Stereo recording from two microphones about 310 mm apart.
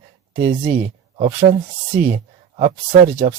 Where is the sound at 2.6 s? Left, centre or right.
Right.